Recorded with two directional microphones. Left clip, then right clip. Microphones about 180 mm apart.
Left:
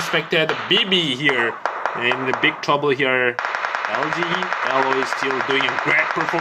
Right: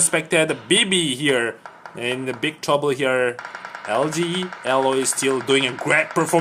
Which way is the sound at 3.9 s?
50° left (ahead or behind).